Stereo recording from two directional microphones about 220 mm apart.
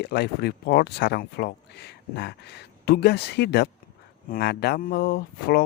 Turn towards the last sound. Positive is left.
turn(degrees=45)  # may be behind; listen again after turning